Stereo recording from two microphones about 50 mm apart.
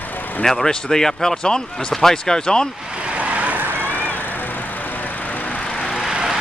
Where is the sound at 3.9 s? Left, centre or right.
Left.